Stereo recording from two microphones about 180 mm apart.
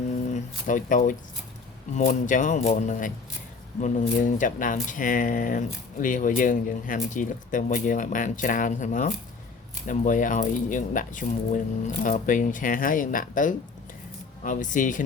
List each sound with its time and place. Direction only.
0.3 s speech: 45° left (ahead or behind)